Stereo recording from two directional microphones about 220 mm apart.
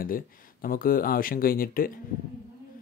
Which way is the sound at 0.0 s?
40° left (ahead or behind).